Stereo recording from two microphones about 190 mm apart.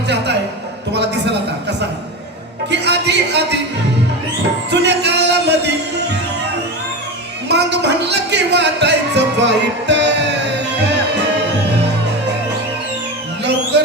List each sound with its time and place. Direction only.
0.9 s music: 65° right (ahead or behind)
2.6 s music: 65° right (ahead or behind)
4.7 s music: 60° right (ahead or behind)
7.4 s speech: 65° right (ahead or behind)
11.7 s music: 65° right (ahead or behind)